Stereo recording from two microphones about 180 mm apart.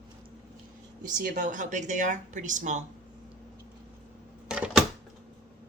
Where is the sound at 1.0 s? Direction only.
45° right (ahead or behind).